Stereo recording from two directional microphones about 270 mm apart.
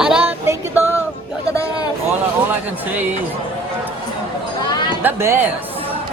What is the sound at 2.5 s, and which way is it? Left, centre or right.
Speech, centre.